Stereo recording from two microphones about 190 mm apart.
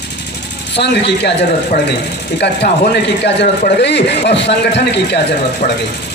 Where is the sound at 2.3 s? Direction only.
60° left (ahead or behind).